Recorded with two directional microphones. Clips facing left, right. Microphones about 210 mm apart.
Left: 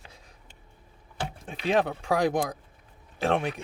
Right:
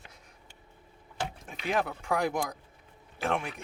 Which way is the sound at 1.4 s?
30° left (ahead or behind).